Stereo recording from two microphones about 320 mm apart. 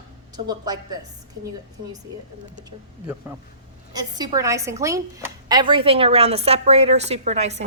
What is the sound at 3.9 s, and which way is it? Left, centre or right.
A woman's voice, centre.